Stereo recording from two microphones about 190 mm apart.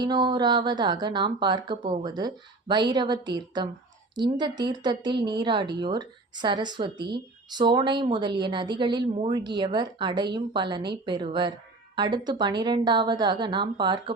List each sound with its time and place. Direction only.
0.0 s a woman's voice: 25° right (ahead or behind)